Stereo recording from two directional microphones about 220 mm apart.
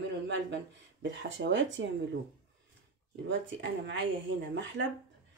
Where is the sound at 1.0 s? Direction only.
55° right (ahead or behind).